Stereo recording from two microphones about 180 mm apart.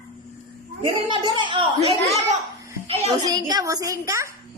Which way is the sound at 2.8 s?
35° right (ahead or behind).